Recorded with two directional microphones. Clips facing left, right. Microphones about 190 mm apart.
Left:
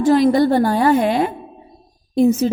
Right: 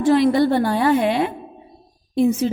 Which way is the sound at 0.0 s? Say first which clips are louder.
Left 2 dB; 40° left (ahead or behind).